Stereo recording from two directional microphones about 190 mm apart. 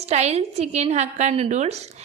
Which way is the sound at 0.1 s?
35° right (ahead or behind).